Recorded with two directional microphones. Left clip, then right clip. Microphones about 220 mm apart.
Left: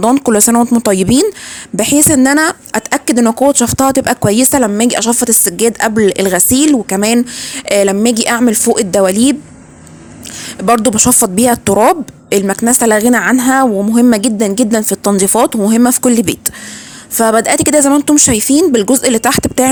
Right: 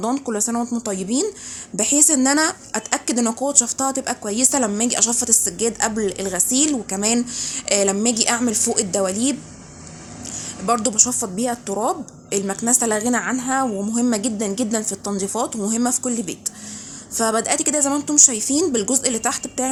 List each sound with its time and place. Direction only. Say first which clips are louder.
0.0 s speech: left 13 dB; 45° left (ahead or behind)
10.7 s speech: left 9 dB; 40° left (ahead or behind)